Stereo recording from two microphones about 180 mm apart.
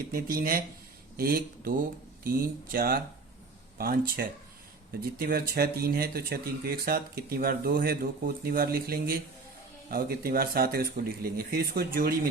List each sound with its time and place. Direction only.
0.1 s speech: 55° right (ahead or behind)
2.7 s speech: 55° right (ahead or behind)